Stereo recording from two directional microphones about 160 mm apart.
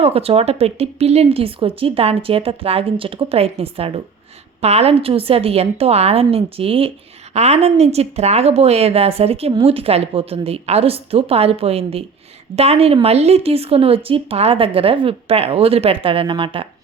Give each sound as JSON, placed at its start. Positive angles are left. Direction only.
{"t": 0.0, "sound": "a woman's voice", "side_deg": -40}